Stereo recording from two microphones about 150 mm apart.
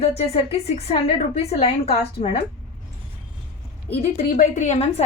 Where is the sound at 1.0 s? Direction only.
45° left (ahead or behind).